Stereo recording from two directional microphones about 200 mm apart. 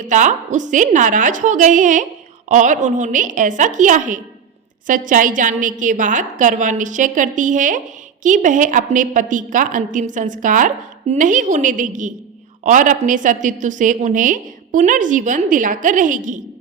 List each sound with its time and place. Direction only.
0.0 s a woman's voice: 40° right (ahead or behind)